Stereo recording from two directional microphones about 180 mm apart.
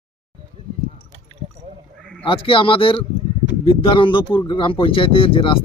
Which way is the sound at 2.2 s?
30° left (ahead or behind).